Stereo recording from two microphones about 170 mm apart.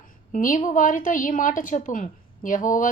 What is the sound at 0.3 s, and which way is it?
A woman's voice, 50° left (ahead or behind).